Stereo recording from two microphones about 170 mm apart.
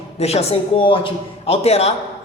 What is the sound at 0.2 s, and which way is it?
A man's voice, 40° left (ahead or behind).